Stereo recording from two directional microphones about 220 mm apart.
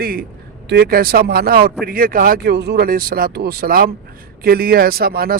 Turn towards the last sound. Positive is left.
turn(degrees=-45)  # may be behind; listen again after turning